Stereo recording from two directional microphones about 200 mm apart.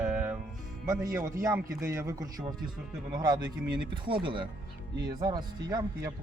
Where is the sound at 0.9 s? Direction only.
15° right (ahead or behind).